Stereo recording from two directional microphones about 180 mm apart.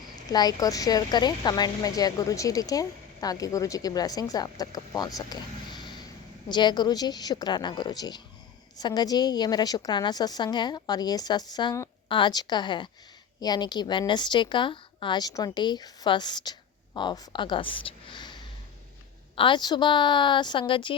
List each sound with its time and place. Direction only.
0.3 s a woman's voice: 20° left (ahead or behind)
19.4 s a woman's voice: 25° left (ahead or behind)